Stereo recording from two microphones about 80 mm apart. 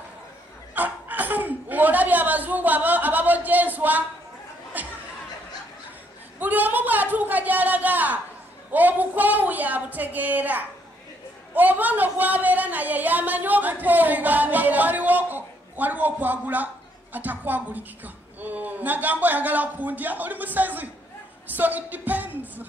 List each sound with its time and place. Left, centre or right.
0.7 s chuckle: right
4.7 s a sound: right
6.4 s a woman's voice: right